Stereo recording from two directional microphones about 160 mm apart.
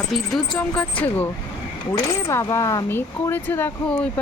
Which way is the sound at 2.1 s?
20° left (ahead or behind).